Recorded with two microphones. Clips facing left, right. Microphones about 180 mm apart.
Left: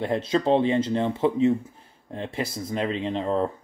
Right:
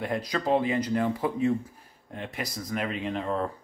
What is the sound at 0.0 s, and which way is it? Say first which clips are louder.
A man's voice: left 6 dB; 25° left (ahead or behind).